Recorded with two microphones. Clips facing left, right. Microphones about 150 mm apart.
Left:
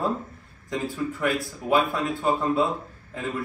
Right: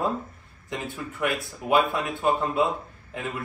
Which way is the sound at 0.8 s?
20° right (ahead or behind).